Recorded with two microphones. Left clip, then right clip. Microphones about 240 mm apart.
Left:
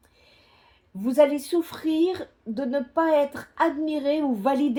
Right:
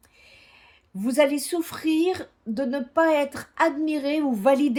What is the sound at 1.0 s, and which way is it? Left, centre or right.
Speech, right.